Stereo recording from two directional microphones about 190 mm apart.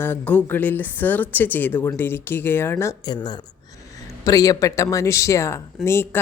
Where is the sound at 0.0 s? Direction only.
10° left (ahead or behind).